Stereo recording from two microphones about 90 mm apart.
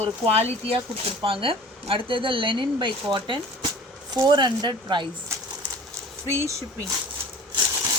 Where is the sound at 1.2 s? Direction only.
85° right; by 5.0 s 55° right (ahead or behind).